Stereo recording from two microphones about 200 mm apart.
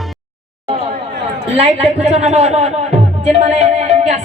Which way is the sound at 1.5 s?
35° right (ahead or behind).